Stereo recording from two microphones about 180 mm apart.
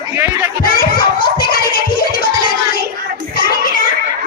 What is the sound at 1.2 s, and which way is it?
Music, 55° left (ahead or behind).